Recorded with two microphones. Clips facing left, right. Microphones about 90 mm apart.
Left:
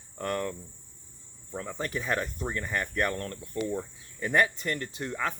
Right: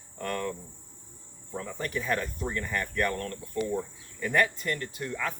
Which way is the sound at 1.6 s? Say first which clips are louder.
Even; 25° left (ahead or behind).